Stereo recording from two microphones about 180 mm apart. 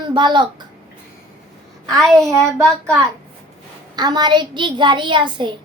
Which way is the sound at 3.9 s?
25° right (ahead or behind).